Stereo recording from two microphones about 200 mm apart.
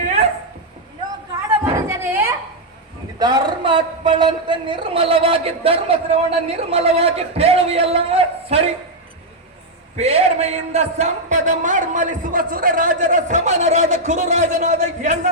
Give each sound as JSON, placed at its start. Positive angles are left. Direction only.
{"t": 1.6, "sound": "a sound", "side_deg": -15}
{"t": 3.2, "sound": "a man's voice", "side_deg": -20}
{"t": 10.0, "sound": "a man's voice", "side_deg": -30}